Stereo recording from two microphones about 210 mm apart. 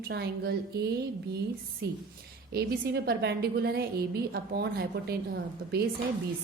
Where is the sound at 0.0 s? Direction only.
50° right (ahead or behind).